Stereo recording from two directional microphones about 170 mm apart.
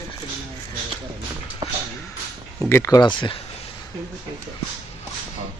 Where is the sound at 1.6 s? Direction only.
25° right (ahead or behind).